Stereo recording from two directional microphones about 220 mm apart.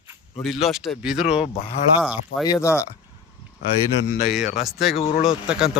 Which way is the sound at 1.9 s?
5° right (ahead or behind).